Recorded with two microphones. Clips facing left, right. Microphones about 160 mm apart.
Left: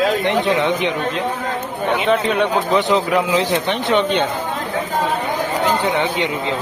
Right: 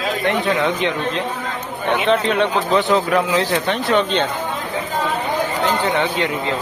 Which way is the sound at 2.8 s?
20° left (ahead or behind).